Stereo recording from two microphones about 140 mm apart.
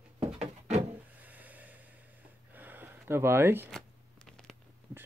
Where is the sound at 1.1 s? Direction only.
10° right (ahead or behind).